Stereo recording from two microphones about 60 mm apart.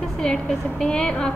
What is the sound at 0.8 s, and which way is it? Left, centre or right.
Speech, centre.